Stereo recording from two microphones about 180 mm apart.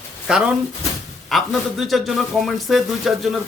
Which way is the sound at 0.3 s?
5° right (ahead or behind).